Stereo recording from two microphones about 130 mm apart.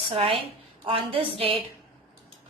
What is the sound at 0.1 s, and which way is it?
A woman's voice, 45° right (ahead or behind).